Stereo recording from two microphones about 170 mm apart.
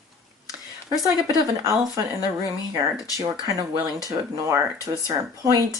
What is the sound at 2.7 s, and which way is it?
Speech, 20° right (ahead or behind).